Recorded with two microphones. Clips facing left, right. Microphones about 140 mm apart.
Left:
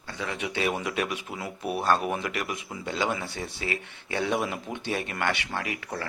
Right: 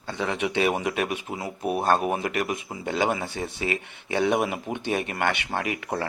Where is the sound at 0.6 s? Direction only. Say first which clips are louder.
Right 3 dB; 55° right (ahead or behind).